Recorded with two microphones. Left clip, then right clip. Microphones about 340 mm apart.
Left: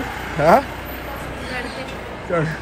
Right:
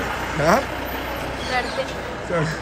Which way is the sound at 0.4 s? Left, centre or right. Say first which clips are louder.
Left 5 dB; centre.